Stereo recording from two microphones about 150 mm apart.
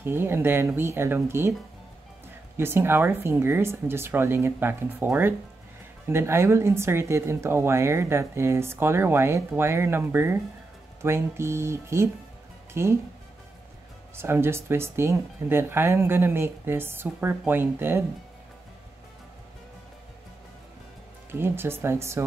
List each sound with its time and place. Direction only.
0.0 s a woman's voice: 15° right (ahead or behind)
2.5 s a woman's voice: 15° right (ahead or behind)
14.1 s a woman's voice: 15° right (ahead or behind)
21.3 s a woman's voice: 15° right (ahead or behind)